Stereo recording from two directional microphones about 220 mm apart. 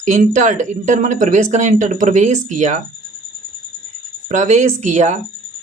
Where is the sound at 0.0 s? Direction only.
35° right (ahead or behind).